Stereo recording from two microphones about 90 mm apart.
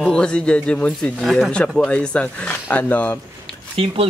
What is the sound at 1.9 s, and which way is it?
Speech, 10° left (ahead or behind).